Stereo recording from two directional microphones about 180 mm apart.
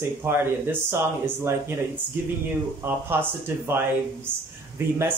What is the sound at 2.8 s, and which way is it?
Speech, 10° right (ahead or behind).